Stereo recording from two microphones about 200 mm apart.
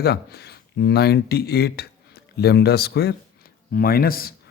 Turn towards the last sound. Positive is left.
turn(degrees=50)  # may be behind; listen again after turning